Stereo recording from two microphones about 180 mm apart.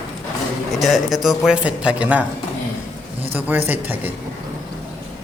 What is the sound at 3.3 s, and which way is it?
Speech, 10° right (ahead or behind).